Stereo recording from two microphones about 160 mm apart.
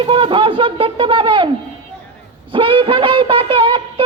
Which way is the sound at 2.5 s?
30° right (ahead or behind).